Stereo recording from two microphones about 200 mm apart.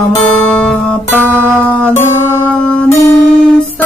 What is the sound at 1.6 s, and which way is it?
Music, 5° left (ahead or behind).